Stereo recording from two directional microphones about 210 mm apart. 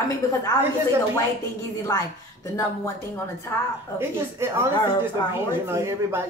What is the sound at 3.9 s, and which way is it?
Speech, 10° right (ahead or behind).